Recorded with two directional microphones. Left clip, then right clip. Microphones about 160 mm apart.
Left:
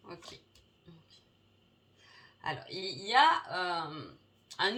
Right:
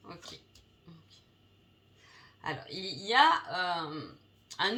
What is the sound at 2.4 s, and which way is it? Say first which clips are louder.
Speech: even; 35° left (ahead or behind).